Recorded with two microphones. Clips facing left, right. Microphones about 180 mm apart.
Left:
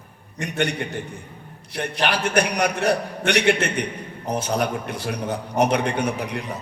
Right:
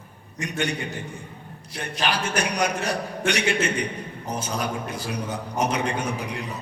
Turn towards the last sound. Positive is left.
turn(degrees=65)  # may be behind; listen again after turning